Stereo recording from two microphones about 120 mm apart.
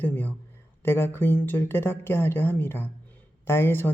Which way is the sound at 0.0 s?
15° left (ahead or behind).